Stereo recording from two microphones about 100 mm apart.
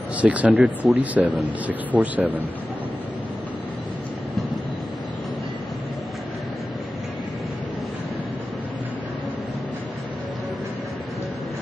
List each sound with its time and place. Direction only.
0.2 s speech: 15° right (ahead or behind)